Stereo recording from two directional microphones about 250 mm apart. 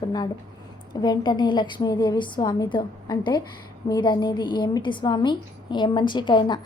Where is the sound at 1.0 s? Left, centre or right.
Centre.